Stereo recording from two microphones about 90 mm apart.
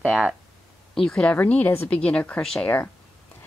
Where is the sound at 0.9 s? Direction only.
10° left (ahead or behind).